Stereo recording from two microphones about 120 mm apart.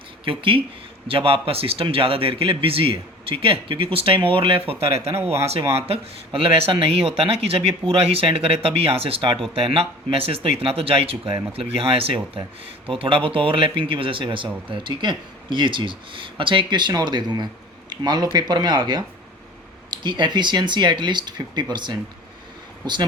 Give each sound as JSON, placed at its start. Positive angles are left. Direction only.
{"t": 0.3, "sound": "speech", "side_deg": -45}
{"t": 5.1, "sound": "speech", "side_deg": -20}
{"t": 5.8, "sound": "speech", "side_deg": -55}
{"t": 19.9, "sound": "speech", "side_deg": -40}